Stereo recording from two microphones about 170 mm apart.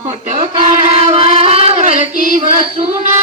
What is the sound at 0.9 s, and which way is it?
Child singing, 40° right (ahead or behind).